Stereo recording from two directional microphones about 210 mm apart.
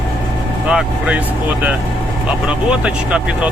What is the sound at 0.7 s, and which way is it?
Speech, 5° right (ahead or behind).